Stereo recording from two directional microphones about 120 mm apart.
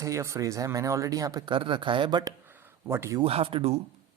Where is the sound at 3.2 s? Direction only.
55° right (ahead or behind).